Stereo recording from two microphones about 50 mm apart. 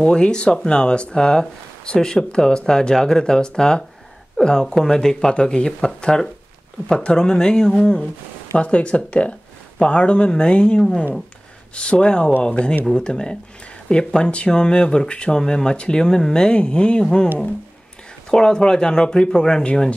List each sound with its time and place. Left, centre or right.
0.0 s speech: centre
18.3 s speech: centre